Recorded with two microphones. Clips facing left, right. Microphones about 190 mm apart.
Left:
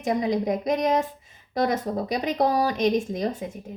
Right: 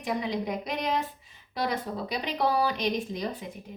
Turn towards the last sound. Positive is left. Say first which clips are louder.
# left 6 dB
turn(degrees=45)  # may be behind; listen again after turning